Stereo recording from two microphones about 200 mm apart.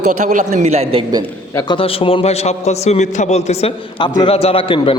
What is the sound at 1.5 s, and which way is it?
A man's voice, 25° left (ahead or behind).